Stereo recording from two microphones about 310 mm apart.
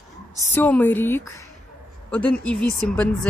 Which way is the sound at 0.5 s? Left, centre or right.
Centre.